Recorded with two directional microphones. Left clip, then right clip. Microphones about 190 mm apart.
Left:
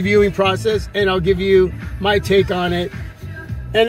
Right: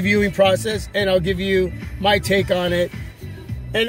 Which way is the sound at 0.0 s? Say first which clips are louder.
Left 2 dB; 35° right (ahead or behind).